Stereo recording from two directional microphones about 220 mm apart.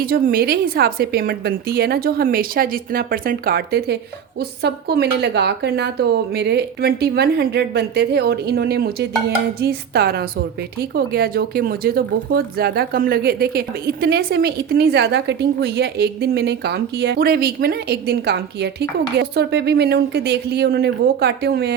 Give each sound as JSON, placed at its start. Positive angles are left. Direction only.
{"t": 0.0, "sound": "speech", "side_deg": -40}